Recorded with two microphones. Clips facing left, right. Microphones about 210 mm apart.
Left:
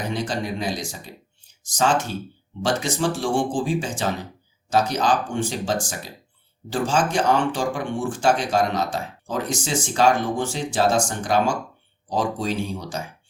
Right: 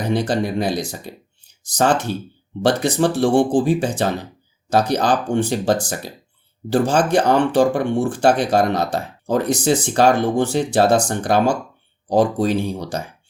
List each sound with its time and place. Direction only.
0.0 s speech: 60° right (ahead or behind)